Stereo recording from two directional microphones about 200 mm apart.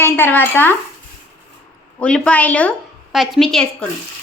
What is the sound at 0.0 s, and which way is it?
Speech, 10° left (ahead or behind).